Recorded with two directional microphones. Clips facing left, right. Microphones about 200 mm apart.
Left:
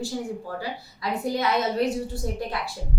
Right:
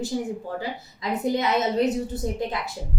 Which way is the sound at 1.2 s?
20° right (ahead or behind).